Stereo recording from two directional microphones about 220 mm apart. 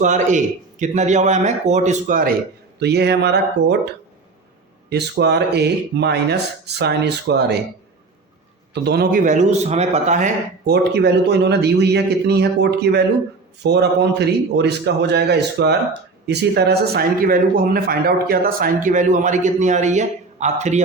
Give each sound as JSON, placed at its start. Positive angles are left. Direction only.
{"t": 0.0, "sound": "speech", "side_deg": -35}
{"t": 2.7, "sound": "a man's voice", "side_deg": -50}
{"t": 4.9, "sound": "a man's voice", "side_deg": -50}
{"t": 8.7, "sound": "speech", "side_deg": -50}
{"t": 10.9, "sound": "a man's voice", "side_deg": -50}